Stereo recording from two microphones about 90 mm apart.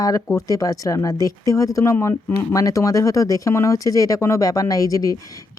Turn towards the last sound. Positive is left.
turn(degrees=40)  # may be behind; listen again after turning